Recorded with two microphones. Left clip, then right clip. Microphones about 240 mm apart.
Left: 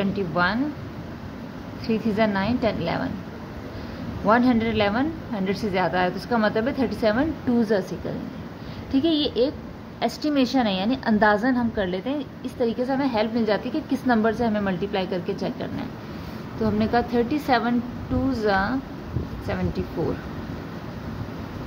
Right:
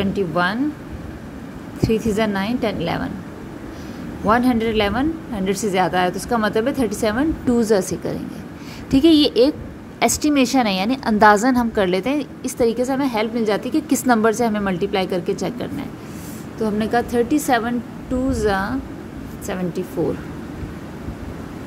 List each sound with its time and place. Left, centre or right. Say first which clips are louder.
0.0 s a woman's voice: right 3 dB; centre
1.8 s a woman's voice: right 4 dB; centre
4.3 s a woman's voice: right 3 dB; centre
8.9 s a woman's voice: right 8 dB; right